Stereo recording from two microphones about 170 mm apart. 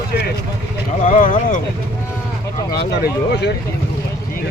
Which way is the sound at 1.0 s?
50° left (ahead or behind).